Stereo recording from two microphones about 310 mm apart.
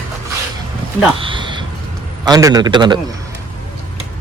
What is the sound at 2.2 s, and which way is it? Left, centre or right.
Speech, centre.